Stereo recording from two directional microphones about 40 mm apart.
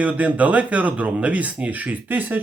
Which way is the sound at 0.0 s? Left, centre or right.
Right.